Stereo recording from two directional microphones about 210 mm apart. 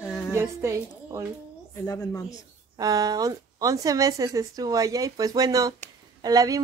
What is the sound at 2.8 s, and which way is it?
Speech, 20° right (ahead or behind).